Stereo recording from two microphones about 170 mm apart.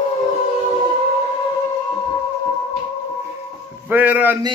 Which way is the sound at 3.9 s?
10° right (ahead or behind).